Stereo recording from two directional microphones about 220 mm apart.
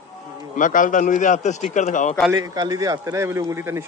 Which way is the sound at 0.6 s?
35° left (ahead or behind).